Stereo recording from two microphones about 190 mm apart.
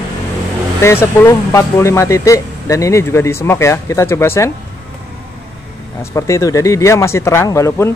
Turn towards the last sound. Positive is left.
turn(degrees=15)  # may be behind; listen again after turning